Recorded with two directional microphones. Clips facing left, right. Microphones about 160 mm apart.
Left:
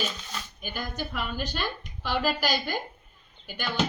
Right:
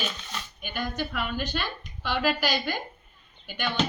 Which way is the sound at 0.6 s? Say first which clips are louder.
Right 3 dB; 40° left (ahead or behind).